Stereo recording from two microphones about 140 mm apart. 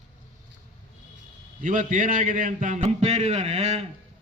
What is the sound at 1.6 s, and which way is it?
A man's voice, 65° right (ahead or behind).